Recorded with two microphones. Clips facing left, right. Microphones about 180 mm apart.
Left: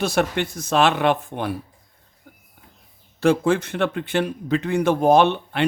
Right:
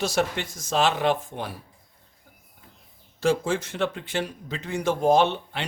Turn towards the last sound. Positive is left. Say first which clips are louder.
# left 4 dB
turn(degrees=60)  # may be behind; listen again after turning